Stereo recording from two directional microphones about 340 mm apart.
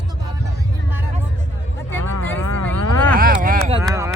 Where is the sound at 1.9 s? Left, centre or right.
Centre.